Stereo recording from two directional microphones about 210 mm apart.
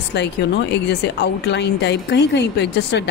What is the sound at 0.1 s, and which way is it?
A woman's voice, 55° left (ahead or behind).